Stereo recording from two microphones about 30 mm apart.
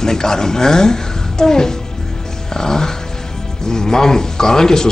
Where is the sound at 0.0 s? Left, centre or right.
Centre.